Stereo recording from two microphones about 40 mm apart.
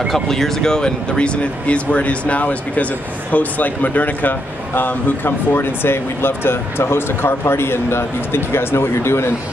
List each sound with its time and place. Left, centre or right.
0.1 s speech: centre; by 9.3 s left